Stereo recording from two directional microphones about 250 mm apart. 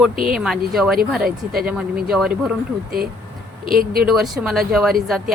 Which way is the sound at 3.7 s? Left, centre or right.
Right.